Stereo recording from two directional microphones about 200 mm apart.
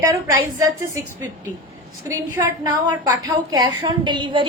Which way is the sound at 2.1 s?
15° right (ahead or behind).